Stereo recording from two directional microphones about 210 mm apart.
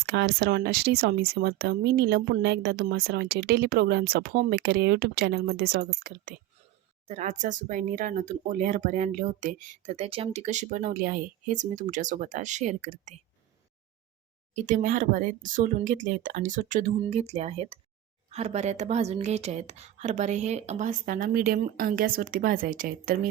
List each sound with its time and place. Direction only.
0.0 s speech: 55° right (ahead or behind); by 13.1 s 35° right (ahead or behind)
14.5 s speech: 40° right (ahead or behind)